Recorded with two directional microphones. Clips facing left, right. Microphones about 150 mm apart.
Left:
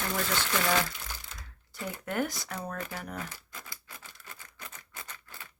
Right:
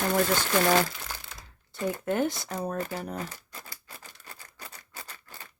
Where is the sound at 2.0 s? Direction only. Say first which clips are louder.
Right 3 dB; 25° right (ahead or behind).